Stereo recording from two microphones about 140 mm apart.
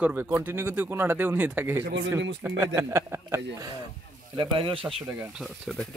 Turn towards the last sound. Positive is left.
turn(degrees=-5)  # may be behind; listen again after turning